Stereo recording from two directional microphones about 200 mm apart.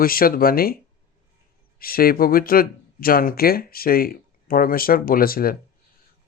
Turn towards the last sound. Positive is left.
turn(degrees=45)  # may be behind; listen again after turning